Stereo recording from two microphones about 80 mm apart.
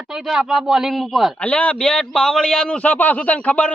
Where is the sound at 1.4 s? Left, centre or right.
Centre.